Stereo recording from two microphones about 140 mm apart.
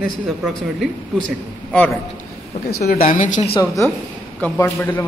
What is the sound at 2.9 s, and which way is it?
Speech, 75° left (ahead or behind).